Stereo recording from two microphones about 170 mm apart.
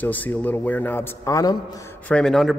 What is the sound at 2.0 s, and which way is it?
Speech, 5° left (ahead or behind).